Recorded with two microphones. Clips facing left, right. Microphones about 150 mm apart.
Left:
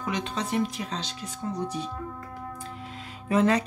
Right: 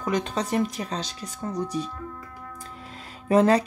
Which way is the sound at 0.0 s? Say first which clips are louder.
Right 4 dB; 45° right (ahead or behind).